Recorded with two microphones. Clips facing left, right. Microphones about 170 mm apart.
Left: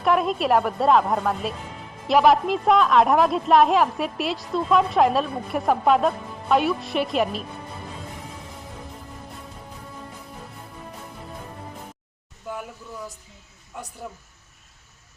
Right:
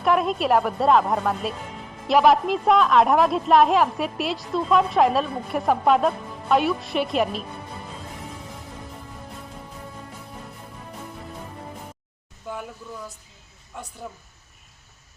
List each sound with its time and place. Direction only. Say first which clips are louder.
0.0 s a woman's voice: even; centre (ahead or behind)
13.7 s a woman's voice: left 1 dB; 5° left (ahead or behind)